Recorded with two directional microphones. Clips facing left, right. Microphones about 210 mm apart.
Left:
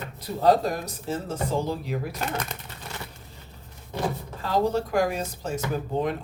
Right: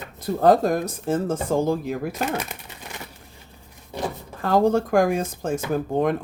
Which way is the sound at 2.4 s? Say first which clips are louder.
Even; 10° right (ahead or behind).